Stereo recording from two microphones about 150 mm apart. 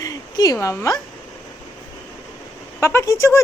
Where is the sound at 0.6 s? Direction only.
20° left (ahead or behind).